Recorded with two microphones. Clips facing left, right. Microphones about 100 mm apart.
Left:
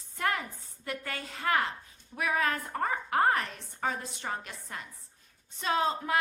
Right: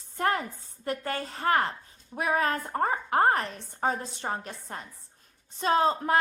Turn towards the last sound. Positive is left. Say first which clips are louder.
# right 5 dB
turn(degrees=-40)  # may be behind; listen again after turning